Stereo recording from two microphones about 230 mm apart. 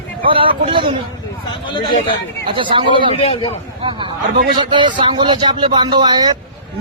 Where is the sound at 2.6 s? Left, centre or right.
Right.